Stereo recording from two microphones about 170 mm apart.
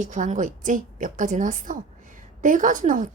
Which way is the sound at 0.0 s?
50° right (ahead or behind).